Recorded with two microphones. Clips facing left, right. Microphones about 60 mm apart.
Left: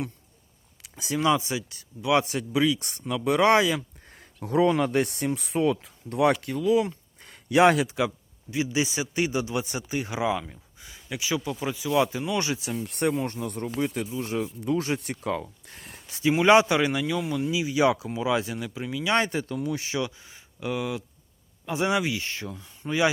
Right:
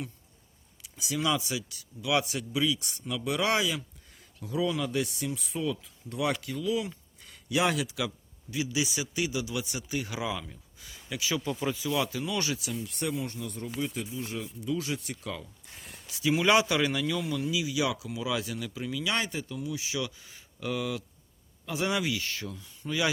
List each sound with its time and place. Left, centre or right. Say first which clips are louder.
0.8 s a man's voice: left 5 dB; left
7.9 s speech: left 7 dB; left
16.3 s speech: left 6 dB; left
19.1 s speech: left 7 dB; left
20.0 s speech: left 4 dB; left